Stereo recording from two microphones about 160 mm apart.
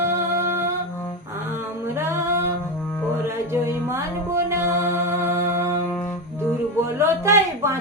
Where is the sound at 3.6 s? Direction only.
15° right (ahead or behind).